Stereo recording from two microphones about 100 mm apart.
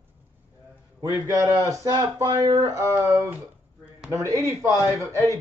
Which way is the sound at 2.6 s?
30° right (ahead or behind).